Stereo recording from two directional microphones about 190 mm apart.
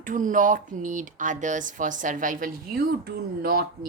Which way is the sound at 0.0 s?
45° right (ahead or behind).